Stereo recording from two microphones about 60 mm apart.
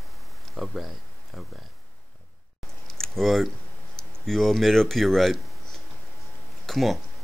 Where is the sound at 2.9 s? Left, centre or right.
Centre.